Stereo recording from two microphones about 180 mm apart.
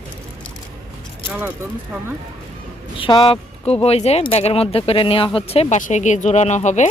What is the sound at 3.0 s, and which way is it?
Speech, 30° left (ahead or behind).